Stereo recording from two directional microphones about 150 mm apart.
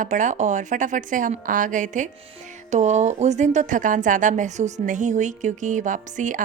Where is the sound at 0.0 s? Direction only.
55° right (ahead or behind).